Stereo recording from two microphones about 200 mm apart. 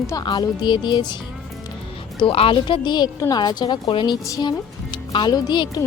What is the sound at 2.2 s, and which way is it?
A woman's voice, 25° left (ahead or behind).